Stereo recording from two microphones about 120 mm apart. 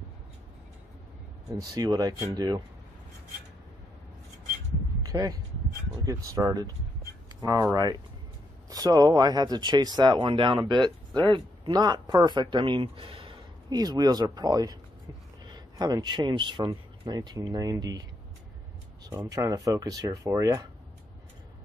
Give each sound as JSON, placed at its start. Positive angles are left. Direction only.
{"t": 1.5, "sound": "speech", "side_deg": -35}
{"t": 5.0, "sound": "speech", "side_deg": -30}
{"t": 13.7, "sound": "speech", "side_deg": -35}
{"t": 19.0, "sound": "speech", "side_deg": -30}